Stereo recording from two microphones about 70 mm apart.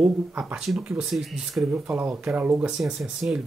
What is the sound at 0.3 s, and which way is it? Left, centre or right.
Speech, right.